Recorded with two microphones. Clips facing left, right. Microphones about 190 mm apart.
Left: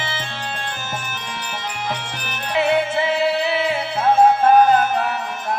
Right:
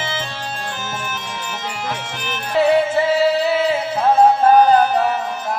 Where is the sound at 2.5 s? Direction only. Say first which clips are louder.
Right 4 dB; 40° right (ahead or behind).